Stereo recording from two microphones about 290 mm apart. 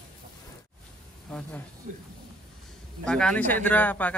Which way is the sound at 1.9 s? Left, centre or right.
Right.